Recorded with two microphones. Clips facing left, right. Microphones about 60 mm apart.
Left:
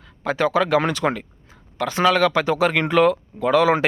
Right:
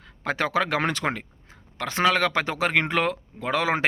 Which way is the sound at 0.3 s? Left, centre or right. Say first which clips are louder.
Left 5 dB; right.